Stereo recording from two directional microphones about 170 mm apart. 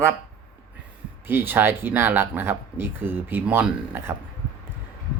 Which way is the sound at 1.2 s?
10° right (ahead or behind).